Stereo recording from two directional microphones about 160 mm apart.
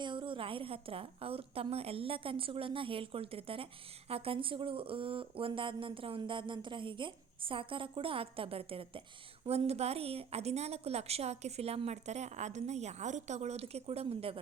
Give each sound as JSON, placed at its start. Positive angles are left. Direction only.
{"t": 0.0, "sound": "a woman's voice", "side_deg": -30}